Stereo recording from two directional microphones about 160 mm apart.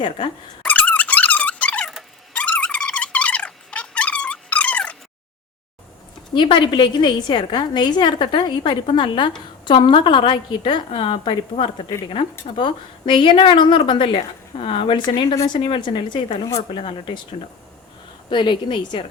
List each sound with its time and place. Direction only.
0.6 s squeak: 10° left (ahead or behind)
6.3 s a woman's voice: 30° left (ahead or behind)
18.3 s a woman's voice: 30° left (ahead or behind)